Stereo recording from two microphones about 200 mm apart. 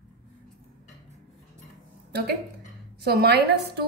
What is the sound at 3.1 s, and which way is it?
Speech, 50° right (ahead or behind).